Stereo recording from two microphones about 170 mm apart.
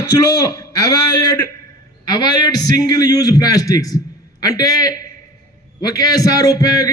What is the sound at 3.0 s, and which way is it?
A man's voice, 20° left (ahead or behind).